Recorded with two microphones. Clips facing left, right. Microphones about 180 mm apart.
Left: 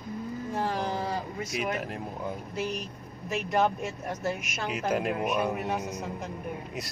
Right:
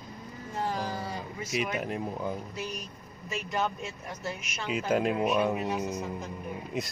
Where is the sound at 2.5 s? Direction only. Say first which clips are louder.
Left 5 dB; 60° left (ahead or behind).